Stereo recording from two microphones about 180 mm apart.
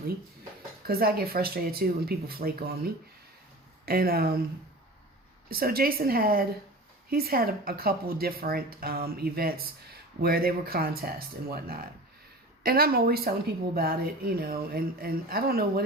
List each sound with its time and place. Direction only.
0.9 s speech: 60° right (ahead or behind)
3.8 s speech: 55° right (ahead or behind)
5.5 s speech: 55° right (ahead or behind)